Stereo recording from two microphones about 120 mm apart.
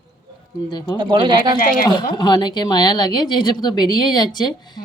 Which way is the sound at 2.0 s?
35° left (ahead or behind).